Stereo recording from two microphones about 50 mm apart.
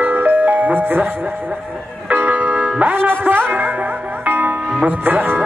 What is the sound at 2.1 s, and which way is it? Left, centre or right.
Music, right.